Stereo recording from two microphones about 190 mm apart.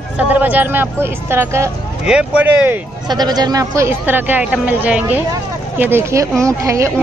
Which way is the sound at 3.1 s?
20° right (ahead or behind).